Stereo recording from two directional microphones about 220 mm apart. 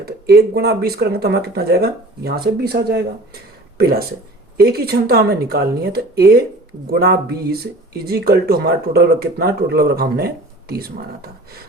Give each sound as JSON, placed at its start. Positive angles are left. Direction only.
{"t": 0.0, "sound": "speech", "side_deg": -45}